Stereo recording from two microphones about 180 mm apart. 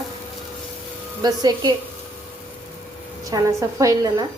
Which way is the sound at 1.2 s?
20° right (ahead or behind).